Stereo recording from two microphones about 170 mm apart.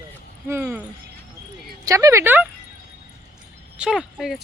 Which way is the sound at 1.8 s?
20° right (ahead or behind).